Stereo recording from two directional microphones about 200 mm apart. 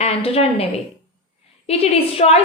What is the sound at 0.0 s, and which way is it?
A woman's voice, 30° left (ahead or behind).